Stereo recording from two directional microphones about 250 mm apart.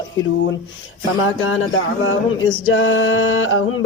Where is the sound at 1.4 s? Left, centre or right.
Left.